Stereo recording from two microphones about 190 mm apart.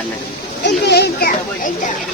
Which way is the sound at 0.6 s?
60° left (ahead or behind).